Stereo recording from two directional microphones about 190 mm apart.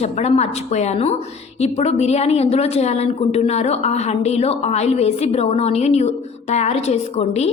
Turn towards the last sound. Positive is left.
turn(degrees=35)  # may be behind; listen again after turning